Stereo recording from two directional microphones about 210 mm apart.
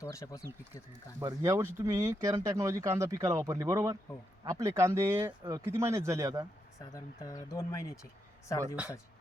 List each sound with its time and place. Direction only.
0.0 s speech: 15° left (ahead or behind)
1.2 s speech: 15° right (ahead or behind)
6.7 s speech: 15° left (ahead or behind)
8.6 s speech: 5° right (ahead or behind)